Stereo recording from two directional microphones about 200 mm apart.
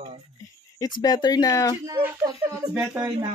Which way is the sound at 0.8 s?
20° left (ahead or behind).